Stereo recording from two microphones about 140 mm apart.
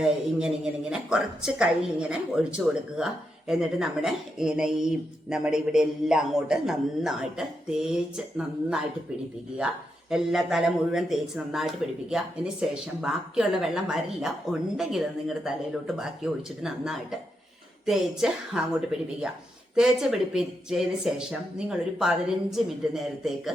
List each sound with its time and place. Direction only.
0.0 s speech: 5° right (ahead or behind)
10.1 s speech: 5° right (ahead or behind)